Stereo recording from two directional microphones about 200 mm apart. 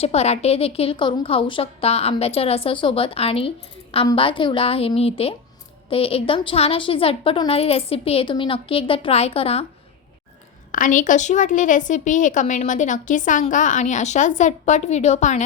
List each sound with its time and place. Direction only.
0.0 s a woman's voice: 30° left (ahead or behind)
10.7 s a woman's voice: 40° left (ahead or behind)